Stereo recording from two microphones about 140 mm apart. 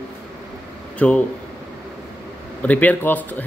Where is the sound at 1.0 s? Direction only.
10° left (ahead or behind).